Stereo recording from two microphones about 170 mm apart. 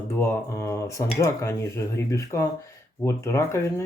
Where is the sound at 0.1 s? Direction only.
15° left (ahead or behind).